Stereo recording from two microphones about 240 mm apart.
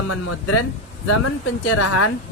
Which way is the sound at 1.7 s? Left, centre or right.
Left.